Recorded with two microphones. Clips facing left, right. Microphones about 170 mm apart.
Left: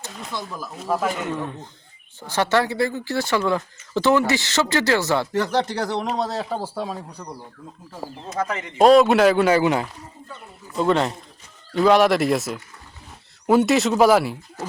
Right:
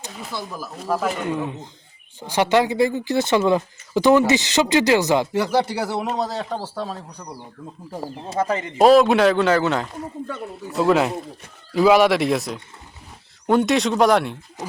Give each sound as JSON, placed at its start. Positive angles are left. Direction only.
{"t": 0.1, "sound": "speech", "side_deg": -5}
{"t": 1.3, "sound": "speech", "side_deg": -15}
{"t": 8.3, "sound": "speech", "side_deg": -30}
{"t": 8.8, "sound": "speech", "side_deg": 0}
{"t": 10.2, "sound": "speech", "side_deg": -80}
{"t": 10.8, "sound": "speech", "side_deg": -5}
{"t": 14.6, "sound": "speech", "side_deg": -20}